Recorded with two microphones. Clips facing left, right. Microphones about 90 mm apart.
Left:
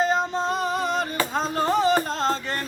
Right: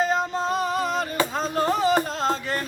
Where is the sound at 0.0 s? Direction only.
Centre (ahead or behind).